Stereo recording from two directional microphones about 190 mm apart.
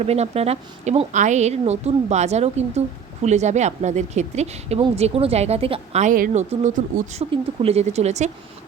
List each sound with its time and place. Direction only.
0.0 s speech: 35° right (ahead or behind)